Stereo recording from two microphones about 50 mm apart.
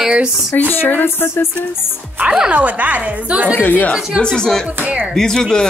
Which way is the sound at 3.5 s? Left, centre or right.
Left.